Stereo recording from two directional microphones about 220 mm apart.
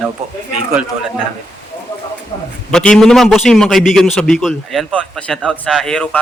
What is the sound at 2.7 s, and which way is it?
Speech, 5° left (ahead or behind).